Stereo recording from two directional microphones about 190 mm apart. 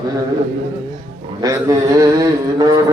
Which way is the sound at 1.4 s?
15° right (ahead or behind).